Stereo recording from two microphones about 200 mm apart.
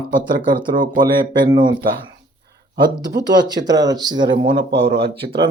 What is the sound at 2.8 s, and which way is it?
Speech, 20° right (ahead or behind).